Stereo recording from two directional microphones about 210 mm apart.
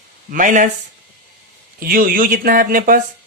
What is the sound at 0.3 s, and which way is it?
Speech, 40° right (ahead or behind).